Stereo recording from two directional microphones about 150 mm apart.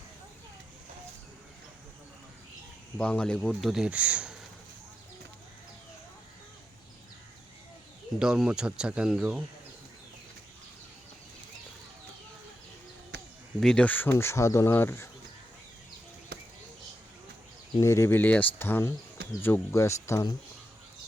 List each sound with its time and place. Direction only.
3.0 s speech: 5° left (ahead or behind)
8.2 s speech: 5° right (ahead or behind)
13.6 s speech: 5° left (ahead or behind)
16.3 s a sound: 90° right
17.7 s speech: 20° left (ahead or behind)